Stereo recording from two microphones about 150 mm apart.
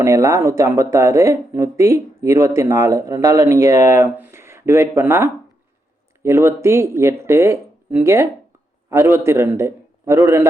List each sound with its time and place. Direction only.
0.0 s a man's voice: 20° right (ahead or behind)